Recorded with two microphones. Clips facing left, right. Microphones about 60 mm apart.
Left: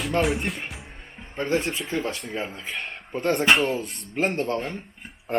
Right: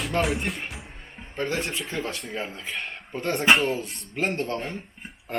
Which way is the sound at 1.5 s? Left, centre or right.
Centre.